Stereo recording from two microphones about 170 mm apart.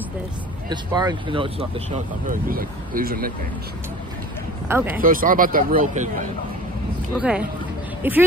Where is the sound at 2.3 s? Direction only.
60° right (ahead or behind).